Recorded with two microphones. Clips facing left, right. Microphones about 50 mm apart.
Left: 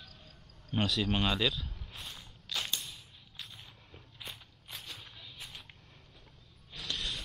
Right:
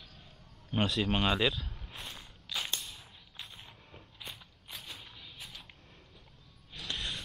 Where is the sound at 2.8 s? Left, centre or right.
Centre.